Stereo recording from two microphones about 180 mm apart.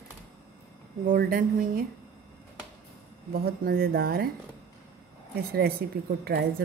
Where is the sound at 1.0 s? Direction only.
50° right (ahead or behind).